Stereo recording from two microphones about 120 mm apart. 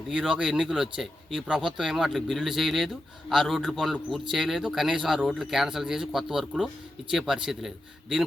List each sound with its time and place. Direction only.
0.1 s speech: 5° right (ahead or behind)